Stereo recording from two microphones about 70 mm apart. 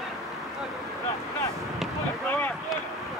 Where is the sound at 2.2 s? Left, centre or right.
Left.